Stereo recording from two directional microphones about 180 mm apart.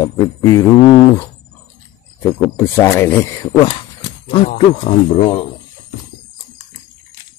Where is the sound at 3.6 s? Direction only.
30° left (ahead or behind).